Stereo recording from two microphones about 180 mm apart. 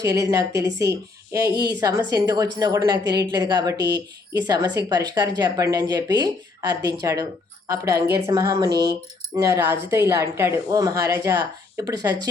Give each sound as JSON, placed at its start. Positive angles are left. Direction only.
{"t": 0.0, "sound": "speech", "side_deg": -20}